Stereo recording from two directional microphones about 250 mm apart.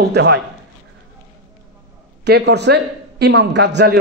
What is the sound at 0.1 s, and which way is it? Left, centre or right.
Speech, right.